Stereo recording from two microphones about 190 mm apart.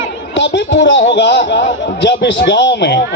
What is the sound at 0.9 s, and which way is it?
A man's voice, 65° left (ahead or behind).